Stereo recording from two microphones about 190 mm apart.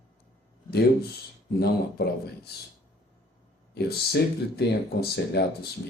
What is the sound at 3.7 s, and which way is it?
Speech, 60° left (ahead or behind).